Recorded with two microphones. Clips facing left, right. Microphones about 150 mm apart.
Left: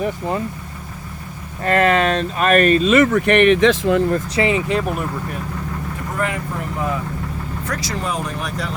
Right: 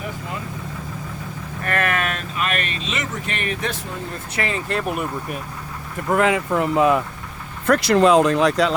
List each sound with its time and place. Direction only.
1.6 s speech: 25° left (ahead or behind)
2.5 s speech: 45° left (ahead or behind); by 4.0 s 90° left
4.4 s speech: 15° left (ahead or behind)
4.7 s speech: centre (ahead or behind)
6.1 s speech: 90° right